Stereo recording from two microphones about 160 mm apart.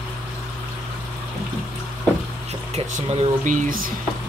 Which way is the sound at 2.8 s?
40° right (ahead or behind).